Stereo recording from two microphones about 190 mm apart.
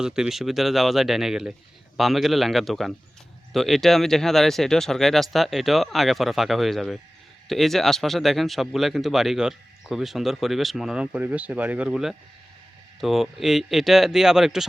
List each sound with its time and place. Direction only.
0.0 s speech: 5° right (ahead or behind)